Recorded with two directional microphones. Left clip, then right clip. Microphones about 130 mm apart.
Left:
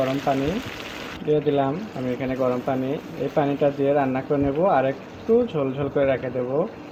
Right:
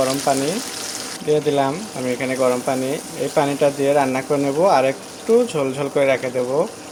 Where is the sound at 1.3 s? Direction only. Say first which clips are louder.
Right 3 dB; 30° right (ahead or behind).